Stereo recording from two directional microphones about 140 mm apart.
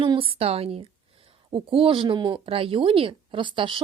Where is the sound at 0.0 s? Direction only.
40° right (ahead or behind).